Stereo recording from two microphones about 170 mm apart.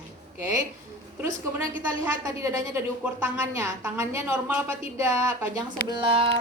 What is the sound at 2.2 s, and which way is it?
A woman's voice, 15° right (ahead or behind).